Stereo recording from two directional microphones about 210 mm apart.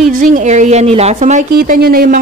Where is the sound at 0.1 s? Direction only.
35° right (ahead or behind).